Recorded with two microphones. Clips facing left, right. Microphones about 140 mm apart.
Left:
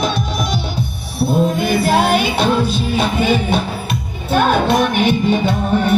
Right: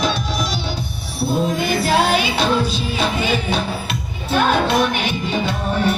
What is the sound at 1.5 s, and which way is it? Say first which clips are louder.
Music: left 3 dB; 55° left (ahead or behind).